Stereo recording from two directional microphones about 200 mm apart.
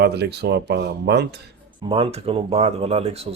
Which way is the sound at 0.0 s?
55° right (ahead or behind).